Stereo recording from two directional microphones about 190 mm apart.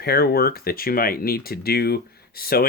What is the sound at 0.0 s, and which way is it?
Speech, 55° left (ahead or behind).